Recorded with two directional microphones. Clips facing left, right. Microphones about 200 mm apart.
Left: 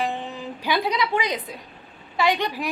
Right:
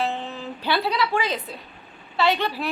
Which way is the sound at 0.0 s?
15° left (ahead or behind).